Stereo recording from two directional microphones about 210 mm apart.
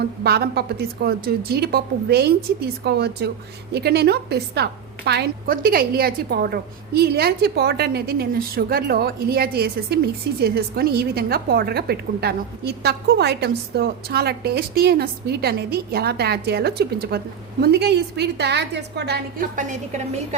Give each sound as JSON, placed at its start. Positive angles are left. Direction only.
{"t": 0.2, "sound": "a woman's voice", "side_deg": -50}